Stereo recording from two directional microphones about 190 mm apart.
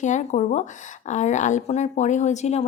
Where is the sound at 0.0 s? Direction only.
40° left (ahead or behind).